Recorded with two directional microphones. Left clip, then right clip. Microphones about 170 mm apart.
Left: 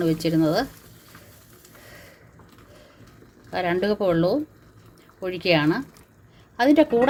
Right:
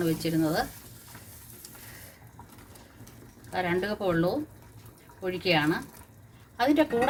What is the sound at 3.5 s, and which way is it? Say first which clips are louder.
Speech: left 6 dB; 60° left (ahead or behind).